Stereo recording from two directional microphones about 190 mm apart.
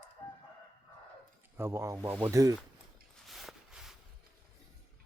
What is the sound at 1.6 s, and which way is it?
Speech, 15° right (ahead or behind).